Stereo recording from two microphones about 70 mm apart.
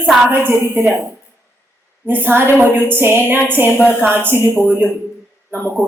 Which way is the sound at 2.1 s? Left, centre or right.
Right.